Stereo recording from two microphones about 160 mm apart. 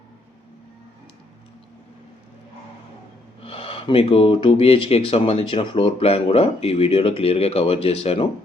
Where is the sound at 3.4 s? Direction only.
35° left (ahead or behind).